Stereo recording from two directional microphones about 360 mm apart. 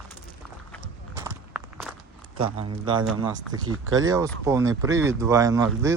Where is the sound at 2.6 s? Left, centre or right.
Centre.